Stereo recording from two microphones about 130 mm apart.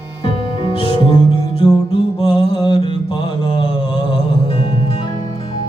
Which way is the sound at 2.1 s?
45° left (ahead or behind).